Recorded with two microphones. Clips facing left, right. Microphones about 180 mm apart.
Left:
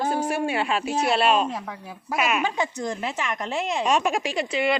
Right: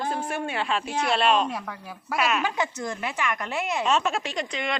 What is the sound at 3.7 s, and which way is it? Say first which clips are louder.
A woman's voice: left 2 dB; 15° left (ahead or behind).